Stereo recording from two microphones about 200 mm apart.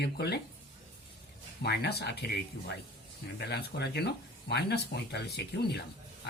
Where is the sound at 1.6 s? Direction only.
55° left (ahead or behind).